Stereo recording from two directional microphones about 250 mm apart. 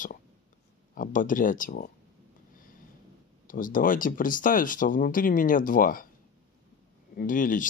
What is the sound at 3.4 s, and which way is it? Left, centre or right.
Speech, left.